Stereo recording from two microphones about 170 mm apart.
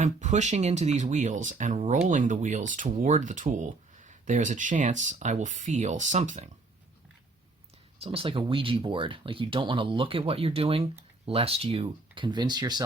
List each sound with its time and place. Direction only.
0.0 s speech: 45° right (ahead or behind)
7.9 s speech: 35° right (ahead or behind)